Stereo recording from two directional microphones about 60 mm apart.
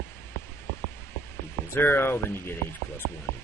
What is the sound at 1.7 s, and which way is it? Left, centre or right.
Speech, left.